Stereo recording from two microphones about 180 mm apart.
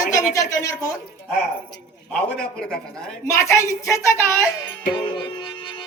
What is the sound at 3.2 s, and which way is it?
A woman's voice, 15° left (ahead or behind).